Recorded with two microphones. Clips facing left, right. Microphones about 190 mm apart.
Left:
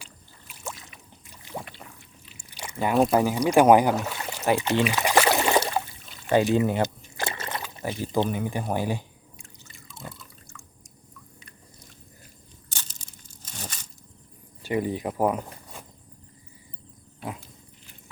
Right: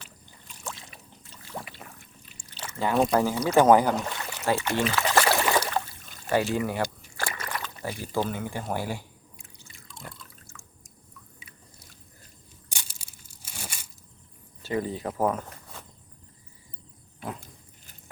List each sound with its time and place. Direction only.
0.0 s rowboat: 10° left (ahead or behind)
1.2 s boat: 15° left (ahead or behind)
2.5 s pour: 15° left (ahead or behind)
2.9 s speech: centre (ahead or behind)
3.2 s speech: 15° left (ahead or behind)
3.9 s boat: 5° left (ahead or behind)
4.4 s a sound: 20° left (ahead or behind)
6.1 s pour: 45° right (ahead or behind)
6.3 s liquid: 20° left (ahead or behind)
7.7 s speech: 20° left (ahead or behind)
9.4 s drip: 5° right (ahead or behind)
11.3 s a sound: 5° right (ahead or behind)
12.6 s crushing: 10° right (ahead or behind)
14.6 s speech: 15° left (ahead or behind)